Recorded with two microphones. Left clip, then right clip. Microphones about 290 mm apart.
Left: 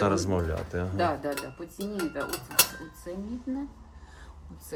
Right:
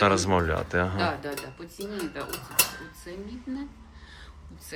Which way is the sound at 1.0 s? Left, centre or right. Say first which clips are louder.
Left 1 dB; left.